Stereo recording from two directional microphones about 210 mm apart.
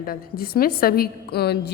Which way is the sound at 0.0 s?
45° left (ahead or behind).